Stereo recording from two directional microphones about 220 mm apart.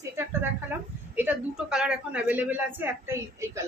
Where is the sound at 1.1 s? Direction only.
5° right (ahead or behind).